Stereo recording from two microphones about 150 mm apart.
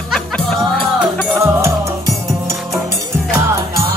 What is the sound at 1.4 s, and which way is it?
Music, 20° right (ahead or behind).